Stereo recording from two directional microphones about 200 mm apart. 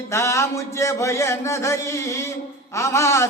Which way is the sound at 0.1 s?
15° left (ahead or behind).